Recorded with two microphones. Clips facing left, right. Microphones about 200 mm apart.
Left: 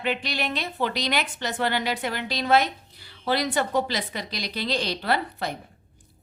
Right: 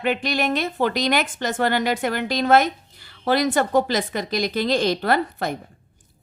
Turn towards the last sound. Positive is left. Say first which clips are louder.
# right 5 dB
turn(degrees=-50)  # may be behind; listen again after turning